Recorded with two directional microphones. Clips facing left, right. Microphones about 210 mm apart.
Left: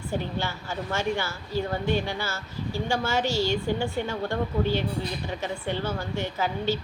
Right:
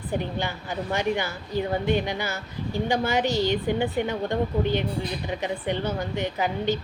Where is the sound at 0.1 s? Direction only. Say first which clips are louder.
Right 2 dB; 15° right (ahead or behind).